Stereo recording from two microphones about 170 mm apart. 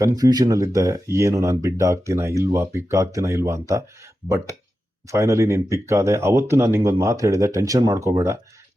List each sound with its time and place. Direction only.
0.0 s speech: 20° right (ahead or behind)
5.0 s speech: 15° right (ahead or behind)